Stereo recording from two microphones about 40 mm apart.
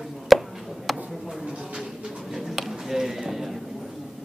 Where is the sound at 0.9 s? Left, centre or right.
Centre.